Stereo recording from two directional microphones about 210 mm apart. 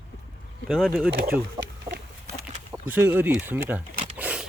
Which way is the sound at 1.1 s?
45° right (ahead or behind).